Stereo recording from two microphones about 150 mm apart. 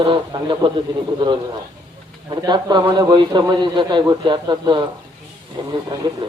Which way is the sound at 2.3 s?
30° right (ahead or behind).